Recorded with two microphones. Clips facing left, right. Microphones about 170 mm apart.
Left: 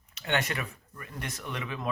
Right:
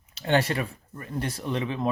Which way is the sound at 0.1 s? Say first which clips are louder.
Right 7 dB; 30° right (ahead or behind).